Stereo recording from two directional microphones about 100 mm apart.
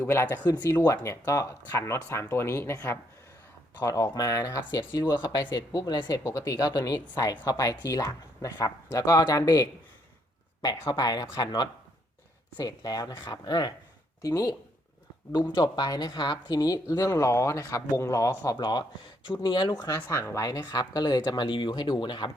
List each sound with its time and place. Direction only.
0.0 s speech: 25° left (ahead or behind)
3.8 s speech: 35° left (ahead or behind)
10.8 s speech: 40° left (ahead or behind)
15.5 s speech: 45° left (ahead or behind)
18.5 s speech: 45° left (ahead or behind)
20.1 s speech: 25° left (ahead or behind)
20.7 s speech: 40° left (ahead or behind)